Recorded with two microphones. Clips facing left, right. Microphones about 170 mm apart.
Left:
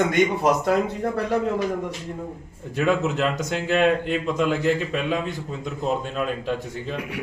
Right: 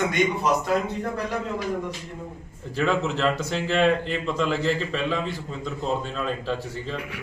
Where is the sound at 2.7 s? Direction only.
15° left (ahead or behind).